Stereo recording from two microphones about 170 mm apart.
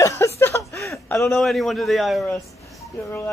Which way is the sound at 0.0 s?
15° left (ahead or behind).